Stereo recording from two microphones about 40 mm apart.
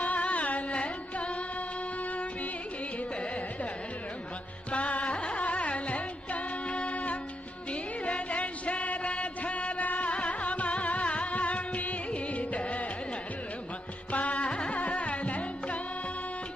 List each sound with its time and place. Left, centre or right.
0.0 s music: left
3.2 s carnatic music: left
4.7 s music: left
14.1 s music: left